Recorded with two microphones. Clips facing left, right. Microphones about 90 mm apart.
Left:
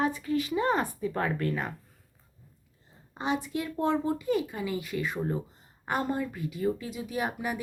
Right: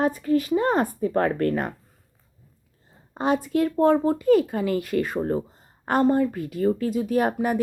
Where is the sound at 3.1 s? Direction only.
45° right (ahead or behind).